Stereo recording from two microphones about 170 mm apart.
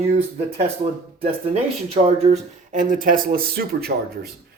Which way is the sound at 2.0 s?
35° right (ahead or behind).